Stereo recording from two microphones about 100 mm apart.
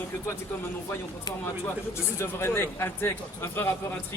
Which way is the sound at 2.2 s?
25° left (ahead or behind).